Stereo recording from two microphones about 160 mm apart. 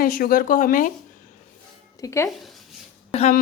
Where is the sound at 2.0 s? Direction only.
20° left (ahead or behind).